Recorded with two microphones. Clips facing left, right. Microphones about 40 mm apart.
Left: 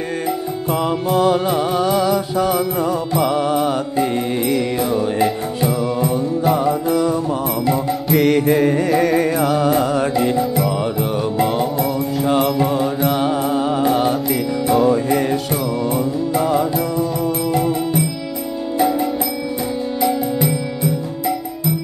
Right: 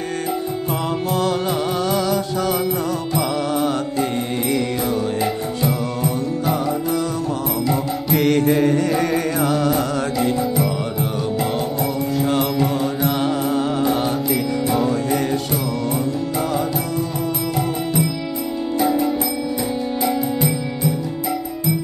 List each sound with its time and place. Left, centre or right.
1.1 s music: centre
5.7 s mantra: centre
8.1 s music: centre